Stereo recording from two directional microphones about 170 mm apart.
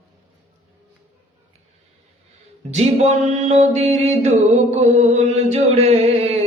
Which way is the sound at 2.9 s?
45° right (ahead or behind).